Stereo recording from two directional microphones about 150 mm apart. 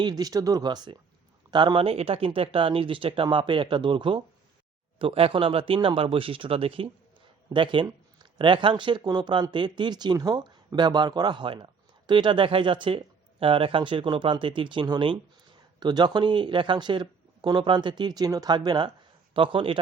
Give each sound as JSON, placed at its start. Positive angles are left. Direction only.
{"t": 0.0, "sound": "speech", "side_deg": -25}